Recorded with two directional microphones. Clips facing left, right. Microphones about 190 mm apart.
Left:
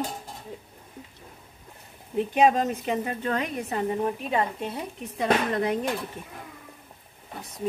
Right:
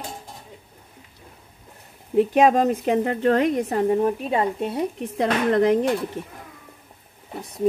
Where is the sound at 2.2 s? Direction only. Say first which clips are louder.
Right 5 dB; 60° right (ahead or behind).